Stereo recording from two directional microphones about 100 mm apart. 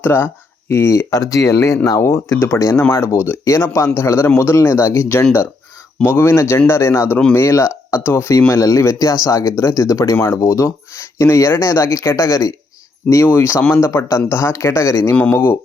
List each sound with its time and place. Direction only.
0.0 s speech: 20° left (ahead or behind)
13.1 s speech: 25° left (ahead or behind)